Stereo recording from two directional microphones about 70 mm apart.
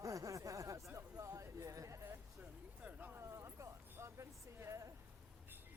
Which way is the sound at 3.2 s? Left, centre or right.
Right.